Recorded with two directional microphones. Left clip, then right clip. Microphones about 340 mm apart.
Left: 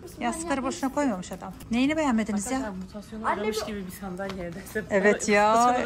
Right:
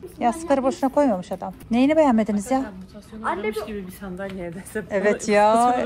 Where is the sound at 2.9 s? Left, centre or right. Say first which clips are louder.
Right 1 dB; left.